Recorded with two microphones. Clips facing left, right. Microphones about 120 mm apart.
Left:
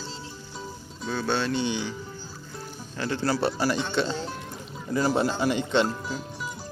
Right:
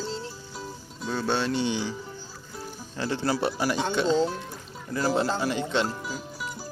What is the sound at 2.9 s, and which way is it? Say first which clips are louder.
Speech: left 1 dB; 20° right (ahead or behind).